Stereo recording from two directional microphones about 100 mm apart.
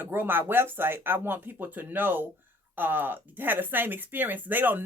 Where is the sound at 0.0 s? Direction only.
20° right (ahead or behind).